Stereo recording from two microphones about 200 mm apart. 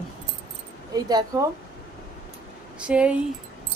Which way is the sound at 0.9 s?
20° right (ahead or behind).